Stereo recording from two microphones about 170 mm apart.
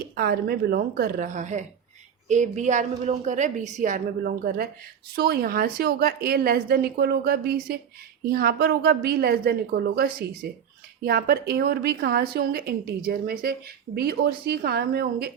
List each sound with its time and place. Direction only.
0.2 s a woman's voice: 65° right (ahead or behind)